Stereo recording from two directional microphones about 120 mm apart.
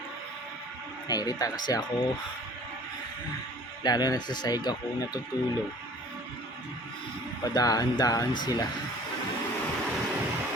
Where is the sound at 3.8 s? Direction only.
35° left (ahead or behind).